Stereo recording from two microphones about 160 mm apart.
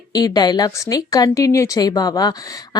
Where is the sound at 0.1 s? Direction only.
25° left (ahead or behind).